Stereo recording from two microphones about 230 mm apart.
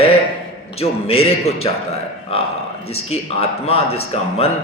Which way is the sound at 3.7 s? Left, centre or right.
Left.